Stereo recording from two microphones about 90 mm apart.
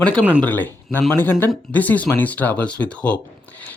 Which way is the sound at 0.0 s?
10° left (ahead or behind).